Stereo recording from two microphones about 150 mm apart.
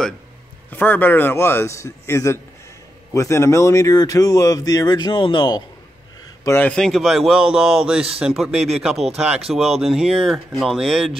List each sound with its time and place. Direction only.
0.7 s a man's voice: 10° left (ahead or behind); by 5.6 s 30° left (ahead or behind)
6.4 s a man's voice: 15° left (ahead or behind)
6.7 s a man's voice: 5° left (ahead or behind)